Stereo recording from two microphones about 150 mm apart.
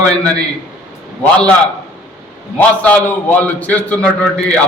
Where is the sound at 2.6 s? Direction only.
10° left (ahead or behind).